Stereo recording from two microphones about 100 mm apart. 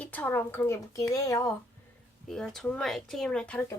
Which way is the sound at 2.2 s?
5° left (ahead or behind).